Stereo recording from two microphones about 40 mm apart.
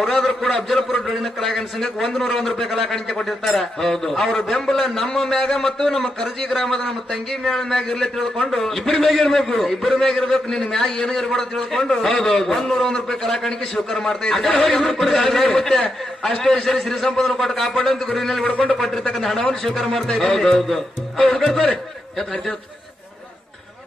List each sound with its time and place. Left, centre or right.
0.1 s a man's voice: centre
14.6 s a man's voice: left; by 18.4 s centre
18.4 s a man's voice: left
19.6 s a man's voice: centre